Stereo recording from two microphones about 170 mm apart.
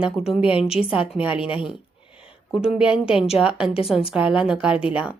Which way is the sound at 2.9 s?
30° left (ahead or behind).